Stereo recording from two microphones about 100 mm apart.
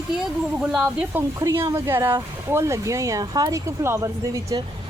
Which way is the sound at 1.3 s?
30° right (ahead or behind).